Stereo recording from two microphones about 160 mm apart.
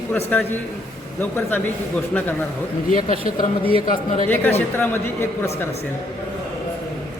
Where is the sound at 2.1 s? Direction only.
10° left (ahead or behind).